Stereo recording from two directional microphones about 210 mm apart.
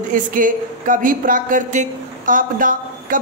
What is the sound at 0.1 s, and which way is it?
A woman's voice, 40° right (ahead or behind).